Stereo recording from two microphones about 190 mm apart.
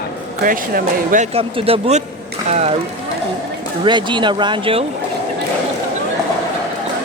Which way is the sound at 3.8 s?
25° right (ahead or behind).